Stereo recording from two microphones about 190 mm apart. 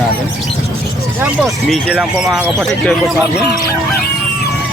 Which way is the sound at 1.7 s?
Centre (ahead or behind).